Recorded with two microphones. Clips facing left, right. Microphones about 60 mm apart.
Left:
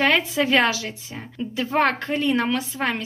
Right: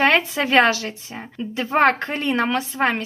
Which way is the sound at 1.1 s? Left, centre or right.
Right.